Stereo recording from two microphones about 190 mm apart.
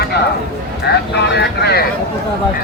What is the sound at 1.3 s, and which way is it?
Speech, 60° left (ahead or behind).